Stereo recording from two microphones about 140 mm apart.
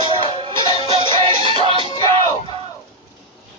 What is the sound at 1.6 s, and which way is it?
Music, 40° right (ahead or behind).